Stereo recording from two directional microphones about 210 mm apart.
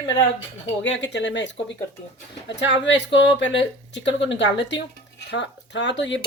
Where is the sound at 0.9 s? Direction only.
60° left (ahead or behind).